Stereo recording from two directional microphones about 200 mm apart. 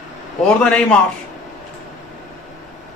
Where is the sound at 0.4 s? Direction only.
5° left (ahead or behind).